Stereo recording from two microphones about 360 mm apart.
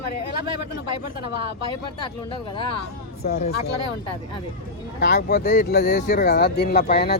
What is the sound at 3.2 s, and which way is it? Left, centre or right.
Speech, left.